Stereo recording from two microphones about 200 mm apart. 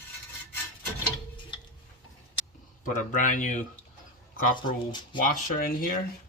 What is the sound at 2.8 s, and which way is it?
Speech, 40° left (ahead or behind).